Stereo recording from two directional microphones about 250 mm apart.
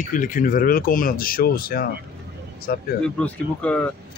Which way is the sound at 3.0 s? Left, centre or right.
Centre.